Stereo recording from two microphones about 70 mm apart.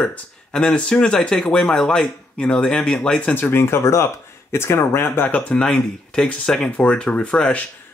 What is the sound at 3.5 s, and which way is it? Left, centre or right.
Speech, left.